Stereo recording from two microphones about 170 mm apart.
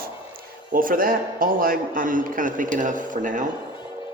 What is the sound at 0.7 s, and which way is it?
A man's voice, 55° right (ahead or behind).